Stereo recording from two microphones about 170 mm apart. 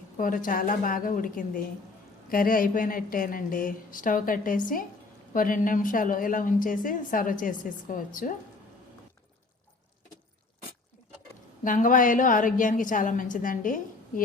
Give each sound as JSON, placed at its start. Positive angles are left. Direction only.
{"t": 0.2, "sound": "a woman's voice", "side_deg": 55}
{"t": 11.6, "sound": "a woman's voice", "side_deg": 50}